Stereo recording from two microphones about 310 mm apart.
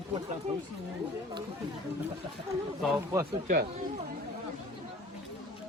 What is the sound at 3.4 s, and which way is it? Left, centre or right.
Speech, right.